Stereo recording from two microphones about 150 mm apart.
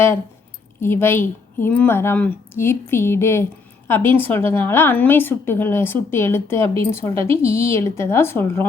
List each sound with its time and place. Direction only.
0.8 s a woman's voice: 15° left (ahead or behind)